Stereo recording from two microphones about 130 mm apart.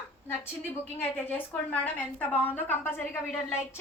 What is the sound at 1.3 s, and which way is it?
A woman's voice, 10° left (ahead or behind).